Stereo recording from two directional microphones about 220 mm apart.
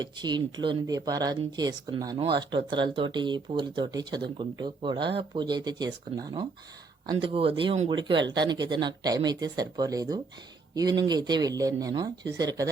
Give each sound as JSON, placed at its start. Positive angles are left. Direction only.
{"t": 0.0, "sound": "speech", "side_deg": -20}